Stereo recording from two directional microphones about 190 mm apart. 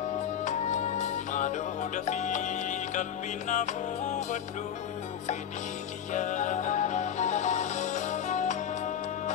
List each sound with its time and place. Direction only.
0.5 s music: 40° left (ahead or behind)
6.1 s music: 40° left (ahead or behind)